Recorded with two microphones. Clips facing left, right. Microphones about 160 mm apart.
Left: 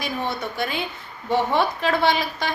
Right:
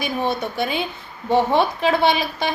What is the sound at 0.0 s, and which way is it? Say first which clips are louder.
A woman's voice: right 4 dB; 20° right (ahead or behind).